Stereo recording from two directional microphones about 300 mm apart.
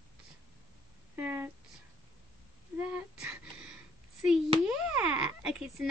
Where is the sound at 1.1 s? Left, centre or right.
Centre.